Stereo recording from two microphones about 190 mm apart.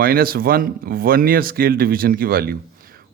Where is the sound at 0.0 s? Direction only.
50° right (ahead or behind).